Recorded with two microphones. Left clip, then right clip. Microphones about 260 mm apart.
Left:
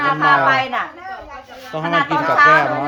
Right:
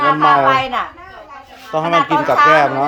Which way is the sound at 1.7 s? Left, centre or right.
Centre.